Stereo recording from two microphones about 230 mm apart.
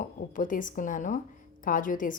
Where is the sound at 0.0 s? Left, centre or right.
Left.